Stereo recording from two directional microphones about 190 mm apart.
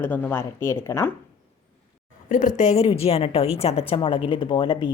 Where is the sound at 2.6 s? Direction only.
35° left (ahead or behind).